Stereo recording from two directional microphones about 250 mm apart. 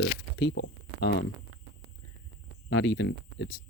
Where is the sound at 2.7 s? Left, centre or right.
Left.